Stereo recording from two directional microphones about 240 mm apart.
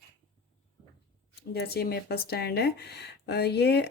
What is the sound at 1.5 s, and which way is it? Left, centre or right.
Speech, left.